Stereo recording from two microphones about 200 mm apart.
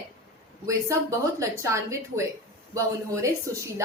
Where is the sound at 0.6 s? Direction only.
15° right (ahead or behind).